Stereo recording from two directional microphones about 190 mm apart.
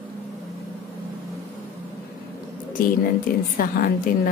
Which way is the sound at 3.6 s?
50° left (ahead or behind).